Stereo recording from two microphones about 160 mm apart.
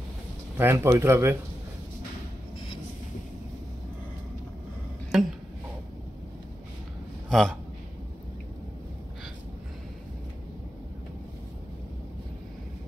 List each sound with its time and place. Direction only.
0.6 s speech: 15° right (ahead or behind)
5.1 s a sound: centre (ahead or behind)
7.2 s a man's voice: 5° left (ahead or behind)